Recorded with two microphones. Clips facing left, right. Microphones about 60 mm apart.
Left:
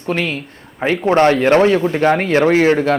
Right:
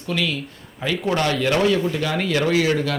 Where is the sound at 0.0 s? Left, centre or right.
Left.